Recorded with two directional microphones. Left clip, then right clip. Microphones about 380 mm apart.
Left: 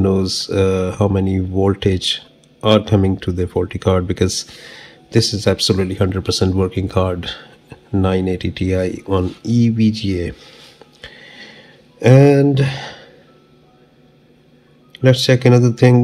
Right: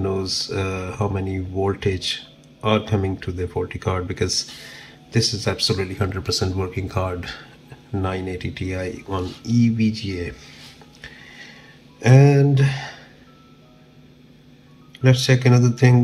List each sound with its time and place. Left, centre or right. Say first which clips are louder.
0.0 s speech: left 6 dB; left
9.0 s speech: left 8 dB; left
9.7 s speech: left 5 dB; left
11.0 s music: left 4 dB; left
12.0 s a sound: left 6 dB; centre
15.0 s speech: left 6 dB; left